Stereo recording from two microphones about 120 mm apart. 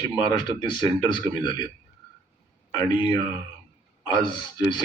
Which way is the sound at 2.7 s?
35° left (ahead or behind).